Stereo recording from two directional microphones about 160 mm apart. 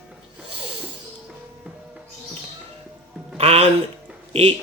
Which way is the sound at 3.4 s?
40° right (ahead or behind).